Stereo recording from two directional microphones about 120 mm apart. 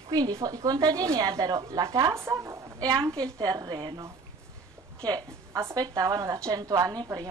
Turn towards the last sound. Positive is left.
turn(degrees=-35)  # may be behind; listen again after turning